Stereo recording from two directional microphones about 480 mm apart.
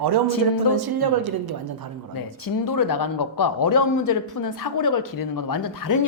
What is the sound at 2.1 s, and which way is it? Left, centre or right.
A man's voice, left.